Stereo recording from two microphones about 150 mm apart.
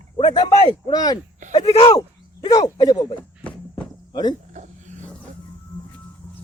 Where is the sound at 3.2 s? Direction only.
10° left (ahead or behind).